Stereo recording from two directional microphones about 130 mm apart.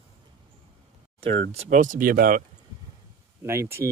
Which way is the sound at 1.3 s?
65° right (ahead or behind).